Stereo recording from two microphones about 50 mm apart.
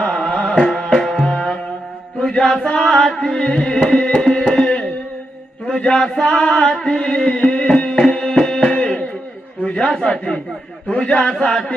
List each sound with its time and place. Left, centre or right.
0.1 s music: centre
0.8 s tabla: left
1.2 s music: centre
4.5 s a sound: centre
5.6 s chant: centre
9.6 s speech: left
10.9 s music: left